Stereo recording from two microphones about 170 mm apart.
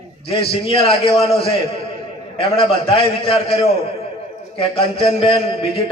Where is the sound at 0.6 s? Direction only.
35° left (ahead or behind).